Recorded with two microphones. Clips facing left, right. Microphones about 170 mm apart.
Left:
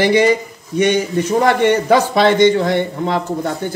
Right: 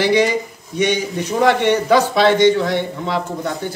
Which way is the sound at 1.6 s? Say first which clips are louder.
Left 2 dB; 50° left (ahead or behind).